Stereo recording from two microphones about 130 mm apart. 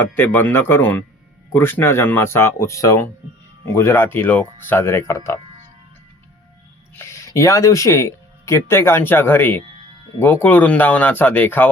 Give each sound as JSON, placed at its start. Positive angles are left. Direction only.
{"t": 0.0, "sound": "speech", "side_deg": 15}
{"t": 7.3, "sound": "speech", "side_deg": 25}